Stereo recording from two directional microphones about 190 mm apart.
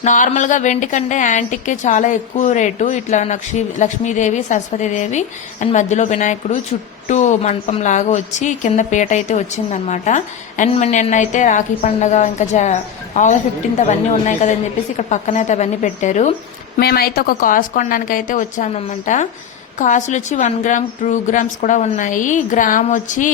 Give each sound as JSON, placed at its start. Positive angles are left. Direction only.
{"t": 0.0, "sound": "a woman's voice", "side_deg": 40}
{"t": 16.7, "sound": "a woman's voice", "side_deg": 55}